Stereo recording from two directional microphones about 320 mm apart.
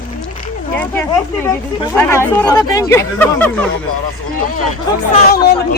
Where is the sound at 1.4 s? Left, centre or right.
Centre.